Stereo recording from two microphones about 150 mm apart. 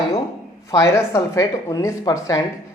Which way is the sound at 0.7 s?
20° left (ahead or behind).